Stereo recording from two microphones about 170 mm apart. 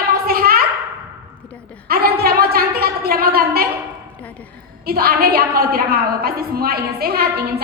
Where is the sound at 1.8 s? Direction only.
60° right (ahead or behind).